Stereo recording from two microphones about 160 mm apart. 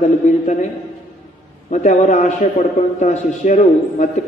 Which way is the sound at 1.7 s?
50° left (ahead or behind).